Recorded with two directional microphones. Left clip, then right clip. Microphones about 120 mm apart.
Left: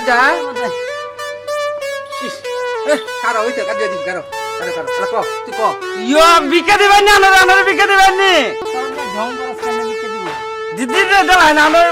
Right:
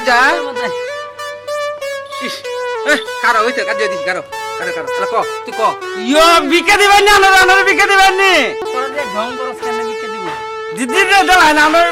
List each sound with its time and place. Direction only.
0.0 s speech: 25° right (ahead or behind)
2.9 s speech: 25° right (ahead or behind)
6.1 s a man's voice: 5° right (ahead or behind)
6.7 s a man's voice: 20° right (ahead or behind); by 8.5 s centre (ahead or behind)
10.8 s speech: 10° right (ahead or behind)